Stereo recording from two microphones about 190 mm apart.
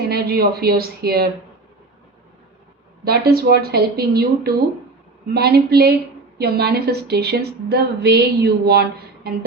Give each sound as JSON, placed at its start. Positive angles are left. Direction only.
{"t": 0.1, "sound": "speech", "side_deg": -55}
{"t": 3.0, "sound": "a woman's voice", "side_deg": -55}